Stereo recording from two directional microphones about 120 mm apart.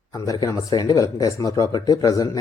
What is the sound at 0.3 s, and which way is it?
Speech, 30° left (ahead or behind).